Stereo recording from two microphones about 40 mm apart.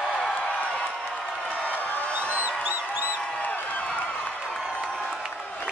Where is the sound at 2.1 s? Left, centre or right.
Right.